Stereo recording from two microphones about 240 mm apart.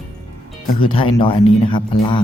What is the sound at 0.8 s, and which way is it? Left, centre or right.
A man's voice, left.